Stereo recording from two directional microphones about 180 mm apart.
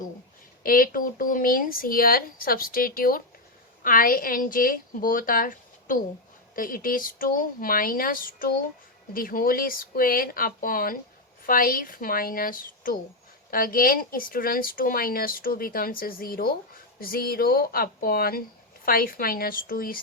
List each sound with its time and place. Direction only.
0.6 s speech: 50° left (ahead or behind)